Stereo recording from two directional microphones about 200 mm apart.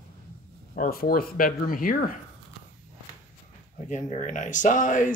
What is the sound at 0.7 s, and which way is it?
Speech, 45° left (ahead or behind).